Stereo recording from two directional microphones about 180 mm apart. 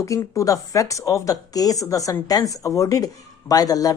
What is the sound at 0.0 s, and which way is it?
Speech, 15° left (ahead or behind).